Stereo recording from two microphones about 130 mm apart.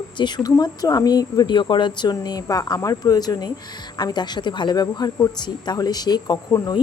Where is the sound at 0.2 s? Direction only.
35° left (ahead or behind).